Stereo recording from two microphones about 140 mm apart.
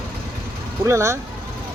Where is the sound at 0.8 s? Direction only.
20° right (ahead or behind).